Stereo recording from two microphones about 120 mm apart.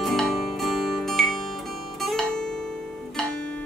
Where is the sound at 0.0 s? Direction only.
Centre (ahead or behind).